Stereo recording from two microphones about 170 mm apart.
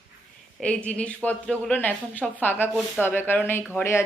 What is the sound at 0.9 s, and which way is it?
A woman's voice, 10° left (ahead or behind).